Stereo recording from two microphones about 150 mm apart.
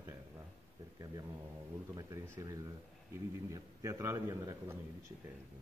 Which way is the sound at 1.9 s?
20° right (ahead or behind).